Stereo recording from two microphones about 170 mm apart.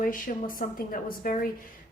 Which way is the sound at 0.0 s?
55° left (ahead or behind).